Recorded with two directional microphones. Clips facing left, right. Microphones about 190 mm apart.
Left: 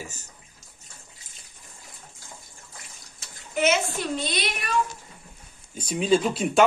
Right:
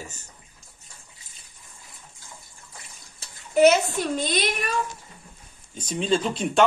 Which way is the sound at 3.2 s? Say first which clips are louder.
Right 8 dB; 35° right (ahead or behind).